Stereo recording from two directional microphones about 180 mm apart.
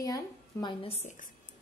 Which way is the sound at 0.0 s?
20° left (ahead or behind).